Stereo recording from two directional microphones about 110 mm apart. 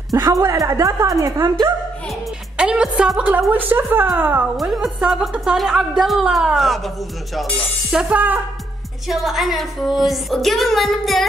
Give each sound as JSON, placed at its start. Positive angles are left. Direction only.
{"t": 0.1, "sound": "a woman's voice", "side_deg": -30}
{"t": 2.5, "sound": "music", "side_deg": -5}
{"t": 3.5, "sound": "music", "side_deg": -15}
{"t": 4.6, "sound": "speech", "side_deg": 0}
{"t": 7.3, "sound": "music", "side_deg": 0}
{"t": 9.0, "sound": "speech", "side_deg": 0}